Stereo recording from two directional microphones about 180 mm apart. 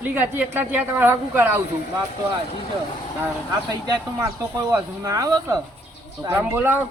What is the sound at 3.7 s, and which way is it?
A woman's voice, 25° right (ahead or behind).